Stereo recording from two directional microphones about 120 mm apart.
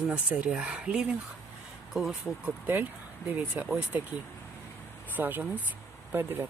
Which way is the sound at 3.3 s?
15° right (ahead or behind).